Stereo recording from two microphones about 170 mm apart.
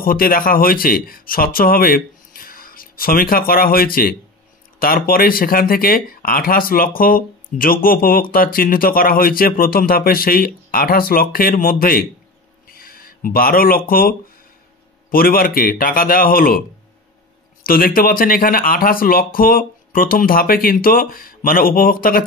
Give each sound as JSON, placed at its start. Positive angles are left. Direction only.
{"t": 0.0, "sound": "speech", "side_deg": 55}
{"t": 12.6, "sound": "a sound", "side_deg": 60}
{"t": 15.0, "sound": "speech", "side_deg": 60}
{"t": 17.6, "sound": "speech", "side_deg": 55}